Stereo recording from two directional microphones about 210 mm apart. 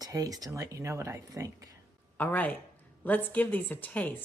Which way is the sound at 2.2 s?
10° left (ahead or behind).